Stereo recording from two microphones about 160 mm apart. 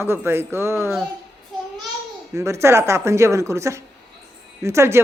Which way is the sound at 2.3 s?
20° right (ahead or behind).